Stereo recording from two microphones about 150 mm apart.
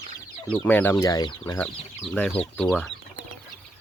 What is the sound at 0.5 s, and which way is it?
Speech, 10° left (ahead or behind).